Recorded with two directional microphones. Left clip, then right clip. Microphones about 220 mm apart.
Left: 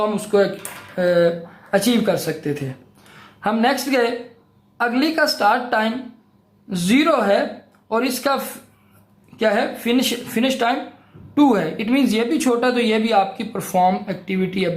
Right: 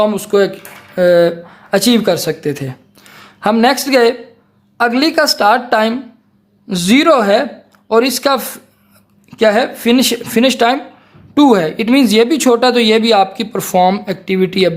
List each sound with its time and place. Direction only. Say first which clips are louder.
0.0 s speech: right 6 dB; 50° right (ahead or behind)